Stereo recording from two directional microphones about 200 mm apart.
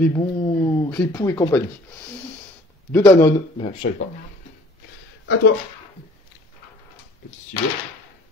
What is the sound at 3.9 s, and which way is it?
Speech, 50° left (ahead or behind).